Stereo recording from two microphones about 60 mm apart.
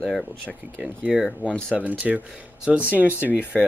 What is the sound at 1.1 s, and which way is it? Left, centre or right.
Speech, centre.